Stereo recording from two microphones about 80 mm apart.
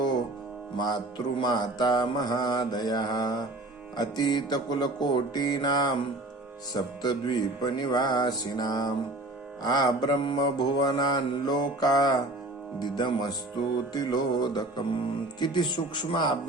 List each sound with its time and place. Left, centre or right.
0.8 s mantra: left
12.8 s speech: left
13.9 s mantra: left
15.4 s speech: left